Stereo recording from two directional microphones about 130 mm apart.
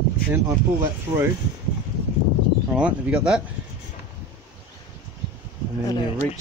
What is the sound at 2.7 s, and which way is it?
Speech, 10° right (ahead or behind).